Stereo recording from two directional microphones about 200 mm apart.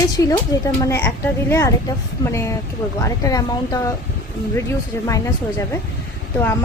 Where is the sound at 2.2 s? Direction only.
15° left (ahead or behind).